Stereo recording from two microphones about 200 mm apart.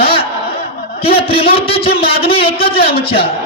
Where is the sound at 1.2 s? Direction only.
30° left (ahead or behind).